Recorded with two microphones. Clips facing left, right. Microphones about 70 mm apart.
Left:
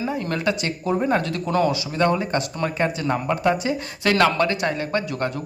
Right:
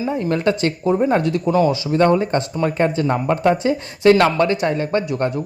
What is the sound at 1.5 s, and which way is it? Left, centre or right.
Speech, centre.